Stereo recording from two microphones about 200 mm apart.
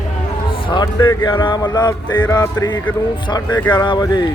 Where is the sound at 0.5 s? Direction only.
20° left (ahead or behind).